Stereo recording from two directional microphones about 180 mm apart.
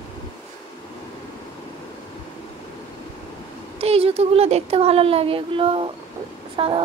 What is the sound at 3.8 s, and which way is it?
A woman's voice, 35° right (ahead or behind).